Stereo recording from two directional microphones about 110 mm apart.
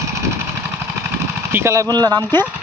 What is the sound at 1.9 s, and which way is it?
Speech, 35° right (ahead or behind).